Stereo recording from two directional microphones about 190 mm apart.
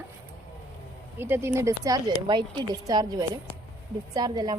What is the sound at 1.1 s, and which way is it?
Speech, 10° right (ahead or behind).